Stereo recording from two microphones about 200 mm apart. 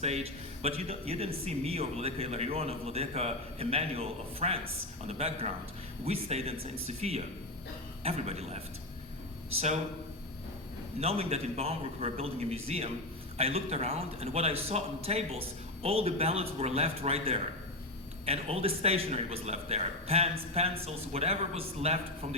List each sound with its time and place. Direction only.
0.0 s a man's voice: 30° right (ahead or behind)
11.0 s a man's voice: 30° right (ahead or behind)